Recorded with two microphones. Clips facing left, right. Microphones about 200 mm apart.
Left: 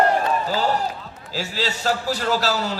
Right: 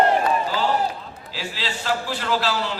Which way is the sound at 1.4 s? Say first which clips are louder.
Left 5 dB; 40° left (ahead or behind).